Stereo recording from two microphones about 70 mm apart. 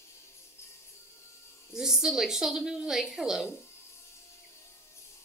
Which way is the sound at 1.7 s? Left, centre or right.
Centre.